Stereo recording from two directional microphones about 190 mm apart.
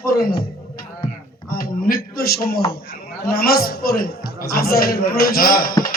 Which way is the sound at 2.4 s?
55° left (ahead or behind).